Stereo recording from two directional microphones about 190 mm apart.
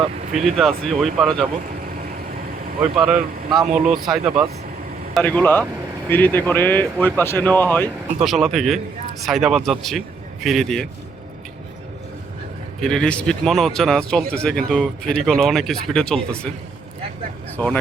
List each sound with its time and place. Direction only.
0.5 s speech: centre (ahead or behind)
2.9 s speech: centre (ahead or behind)
8.2 s speech: centre (ahead or behind)
12.8 s speech: 5° left (ahead or behind)
17.6 s speech: 10° left (ahead or behind)